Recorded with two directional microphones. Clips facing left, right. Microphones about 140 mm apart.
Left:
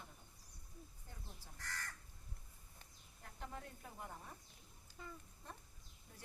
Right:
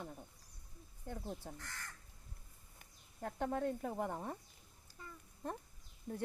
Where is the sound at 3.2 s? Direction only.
70° right (ahead or behind).